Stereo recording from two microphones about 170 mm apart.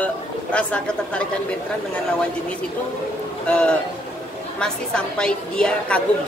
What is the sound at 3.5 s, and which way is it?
A woman's voice, 5° left (ahead or behind).